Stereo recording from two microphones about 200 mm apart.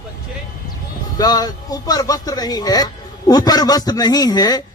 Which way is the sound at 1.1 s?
20° left (ahead or behind).